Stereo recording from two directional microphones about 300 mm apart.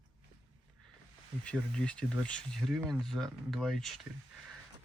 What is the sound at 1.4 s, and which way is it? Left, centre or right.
Speech, centre.